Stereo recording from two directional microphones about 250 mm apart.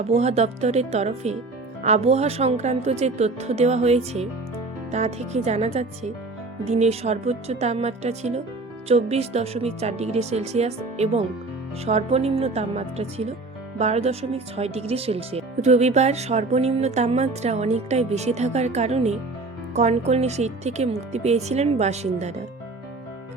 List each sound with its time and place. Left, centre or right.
0.1 s speech: right